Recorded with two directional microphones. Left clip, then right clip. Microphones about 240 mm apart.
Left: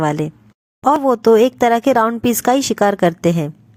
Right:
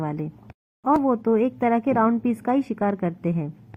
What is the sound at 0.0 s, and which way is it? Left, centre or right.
A woman's voice, left.